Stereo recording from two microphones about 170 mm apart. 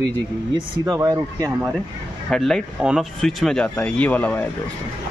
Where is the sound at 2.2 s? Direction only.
5° left (ahead or behind).